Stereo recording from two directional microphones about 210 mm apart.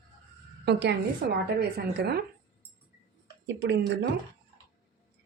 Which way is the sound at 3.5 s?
55° right (ahead or behind).